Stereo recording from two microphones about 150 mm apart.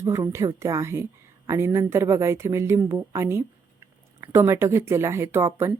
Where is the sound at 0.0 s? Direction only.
20° right (ahead or behind).